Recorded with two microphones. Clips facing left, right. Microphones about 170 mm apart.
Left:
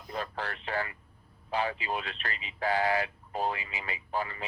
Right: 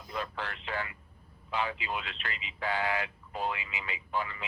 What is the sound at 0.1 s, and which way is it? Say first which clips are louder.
Radio: left 1 dB; 40° left (ahead or behind).